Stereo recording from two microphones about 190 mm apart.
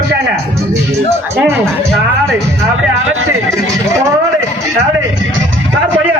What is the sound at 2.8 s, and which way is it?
Speech, 90° right.